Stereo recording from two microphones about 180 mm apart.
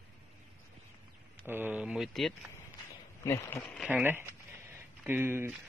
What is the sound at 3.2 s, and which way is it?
Speech, 15° left (ahead or behind).